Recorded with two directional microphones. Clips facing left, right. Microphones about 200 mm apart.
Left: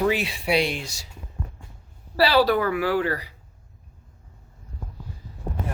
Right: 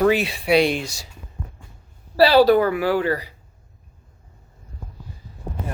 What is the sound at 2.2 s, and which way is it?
Speech, 40° right (ahead or behind).